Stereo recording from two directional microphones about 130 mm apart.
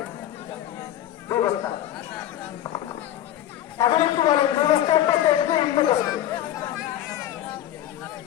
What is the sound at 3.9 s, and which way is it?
Speech, 45° left (ahead or behind).